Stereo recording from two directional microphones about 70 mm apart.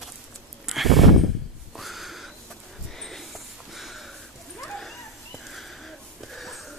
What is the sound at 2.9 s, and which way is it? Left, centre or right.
Sniff, centre.